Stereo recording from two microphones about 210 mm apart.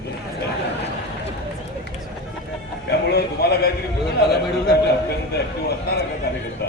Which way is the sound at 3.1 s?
50° left (ahead or behind).